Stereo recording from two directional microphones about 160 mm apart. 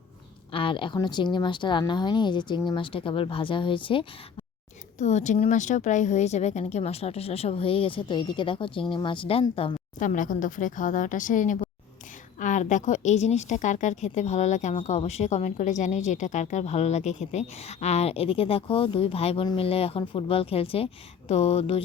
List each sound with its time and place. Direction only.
0.5 s speech: 35° left (ahead or behind)
4.9 s a woman's voice: 45° left (ahead or behind)
10.0 s a woman's voice: 55° left (ahead or behind); by 21.8 s 40° left (ahead or behind)